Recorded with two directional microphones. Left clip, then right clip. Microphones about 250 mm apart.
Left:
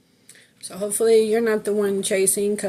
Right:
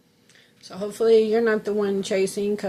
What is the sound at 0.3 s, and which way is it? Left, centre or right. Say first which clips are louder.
A woman's voice: left 3 dB; left.